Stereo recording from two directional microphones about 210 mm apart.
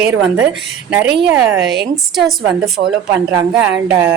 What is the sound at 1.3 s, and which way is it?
A woman's voice, 5° right (ahead or behind).